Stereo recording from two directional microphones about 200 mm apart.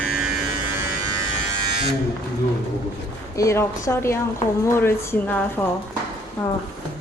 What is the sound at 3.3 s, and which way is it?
A woman's voice, 15° left (ahead or behind).